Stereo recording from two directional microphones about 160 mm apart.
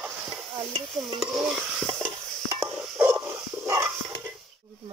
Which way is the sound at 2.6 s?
15° right (ahead or behind).